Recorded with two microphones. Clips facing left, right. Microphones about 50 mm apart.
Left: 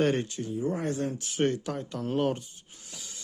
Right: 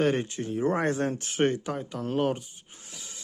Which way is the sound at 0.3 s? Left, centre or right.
Right.